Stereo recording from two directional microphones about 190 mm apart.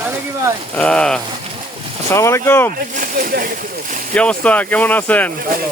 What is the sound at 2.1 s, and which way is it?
Speech, 15° left (ahead or behind).